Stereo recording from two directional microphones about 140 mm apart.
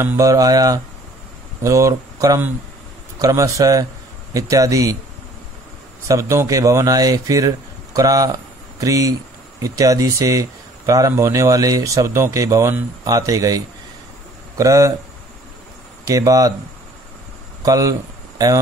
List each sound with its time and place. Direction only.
0.0 s speech: 20° right (ahead or behind)
6.0 s a man's voice: 20° right (ahead or behind)
14.6 s speech: 25° right (ahead or behind)
16.1 s speech: 25° right (ahead or behind)
17.6 s speech: 25° right (ahead or behind)